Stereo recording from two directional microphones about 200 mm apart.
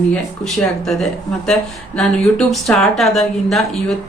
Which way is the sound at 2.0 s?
Centre (ahead or behind).